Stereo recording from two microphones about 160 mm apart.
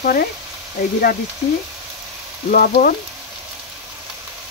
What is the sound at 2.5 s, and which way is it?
Speech, 65° left (ahead or behind).